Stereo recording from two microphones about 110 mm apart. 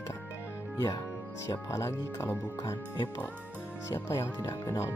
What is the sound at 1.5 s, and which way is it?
Speech, 25° left (ahead or behind).